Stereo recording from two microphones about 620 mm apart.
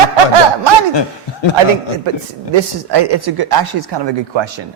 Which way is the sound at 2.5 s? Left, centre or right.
Right.